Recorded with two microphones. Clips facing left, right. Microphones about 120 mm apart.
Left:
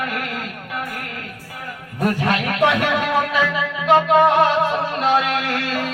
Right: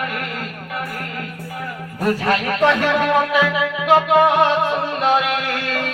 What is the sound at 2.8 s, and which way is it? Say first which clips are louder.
Music: right 3 dB; centre (ahead or behind).